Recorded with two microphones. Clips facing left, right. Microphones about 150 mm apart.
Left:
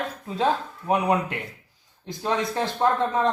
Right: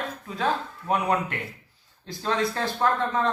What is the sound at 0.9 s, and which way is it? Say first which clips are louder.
Speech: left 2 dB; 15° left (ahead or behind).